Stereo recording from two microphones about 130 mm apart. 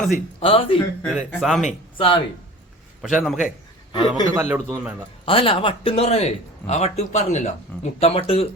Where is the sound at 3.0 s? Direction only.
Centre (ahead or behind).